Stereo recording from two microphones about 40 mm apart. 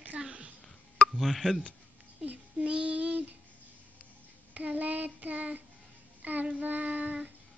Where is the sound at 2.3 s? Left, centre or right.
Right.